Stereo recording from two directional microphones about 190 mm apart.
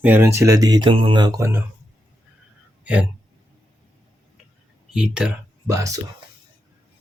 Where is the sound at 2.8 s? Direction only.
5° right (ahead or behind).